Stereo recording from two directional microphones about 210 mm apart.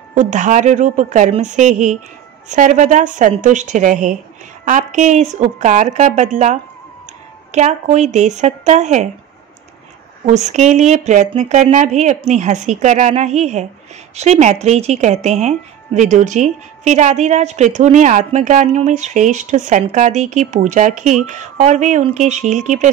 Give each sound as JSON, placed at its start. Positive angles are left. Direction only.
{"t": 0.1, "sound": "speech", "side_deg": -35}
{"t": 10.2, "sound": "speech", "side_deg": -35}